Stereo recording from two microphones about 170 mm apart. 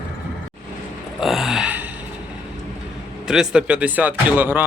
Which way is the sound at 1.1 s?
Centre (ahead or behind).